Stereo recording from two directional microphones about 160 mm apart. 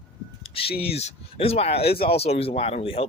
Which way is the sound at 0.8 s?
40° left (ahead or behind).